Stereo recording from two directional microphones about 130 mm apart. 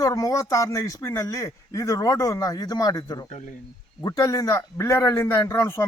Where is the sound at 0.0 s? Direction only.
25° left (ahead or behind).